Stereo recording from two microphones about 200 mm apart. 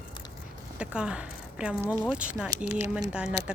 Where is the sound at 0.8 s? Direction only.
5° right (ahead or behind).